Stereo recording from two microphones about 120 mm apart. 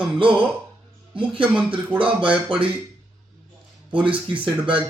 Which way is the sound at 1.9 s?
45° right (ahead or behind).